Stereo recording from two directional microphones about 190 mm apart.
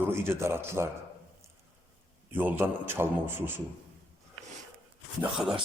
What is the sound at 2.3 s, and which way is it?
A man's voice, 10° right (ahead or behind).